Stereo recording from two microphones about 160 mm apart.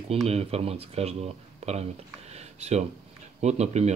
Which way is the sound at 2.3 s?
40° right (ahead or behind).